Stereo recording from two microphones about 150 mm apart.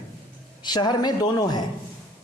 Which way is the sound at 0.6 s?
30° left (ahead or behind).